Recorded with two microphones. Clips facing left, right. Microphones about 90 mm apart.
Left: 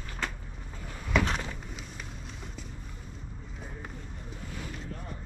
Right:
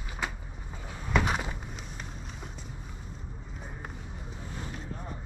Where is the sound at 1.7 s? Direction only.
5° right (ahead or behind).